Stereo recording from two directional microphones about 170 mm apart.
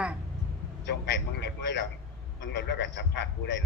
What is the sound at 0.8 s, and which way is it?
A man's voice, 85° left.